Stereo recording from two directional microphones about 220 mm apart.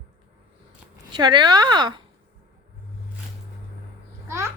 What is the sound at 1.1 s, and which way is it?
Speech, 20° right (ahead or behind).